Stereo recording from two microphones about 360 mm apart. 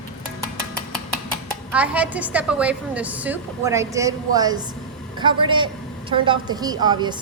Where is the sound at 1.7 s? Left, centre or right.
Centre.